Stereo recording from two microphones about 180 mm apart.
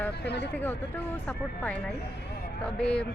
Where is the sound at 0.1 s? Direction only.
70° left (ahead or behind).